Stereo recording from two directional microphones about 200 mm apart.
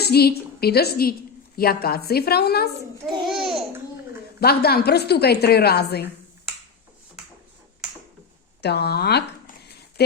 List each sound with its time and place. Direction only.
0.0 s a woman's voice: 50° left (ahead or behind)
3.2 s babbling: centre (ahead or behind)
4.4 s a woman's voice: 50° left (ahead or behind)
8.6 s a woman's voice: 55° left (ahead or behind)